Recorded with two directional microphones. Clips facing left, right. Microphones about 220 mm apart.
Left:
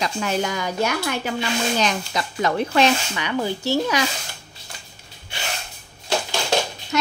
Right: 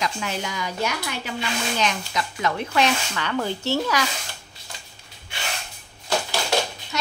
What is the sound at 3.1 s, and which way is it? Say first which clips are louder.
Speech: left 2 dB; 15° left (ahead or behind).